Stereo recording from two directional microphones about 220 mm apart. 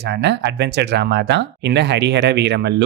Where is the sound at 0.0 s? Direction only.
50° right (ahead or behind).